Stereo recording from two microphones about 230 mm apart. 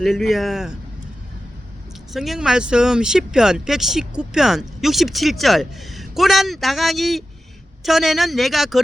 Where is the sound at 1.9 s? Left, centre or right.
Centre.